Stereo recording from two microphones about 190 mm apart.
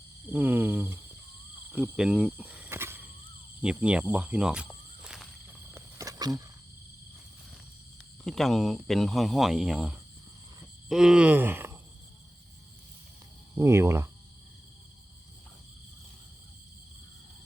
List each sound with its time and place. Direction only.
0.3 s speech: 10° right (ahead or behind)
5.7 s wild animals: 15° right (ahead or behind)
8.2 s speech: centre (ahead or behind)
13.6 s speech: 15° right (ahead or behind)